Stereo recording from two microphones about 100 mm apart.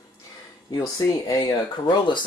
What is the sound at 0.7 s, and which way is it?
Speech, 40° left (ahead or behind).